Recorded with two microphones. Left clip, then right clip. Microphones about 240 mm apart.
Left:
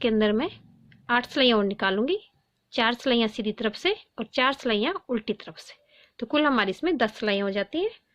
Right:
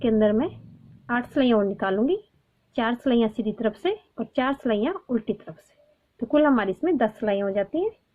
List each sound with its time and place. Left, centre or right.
0.0 s a woman's voice: left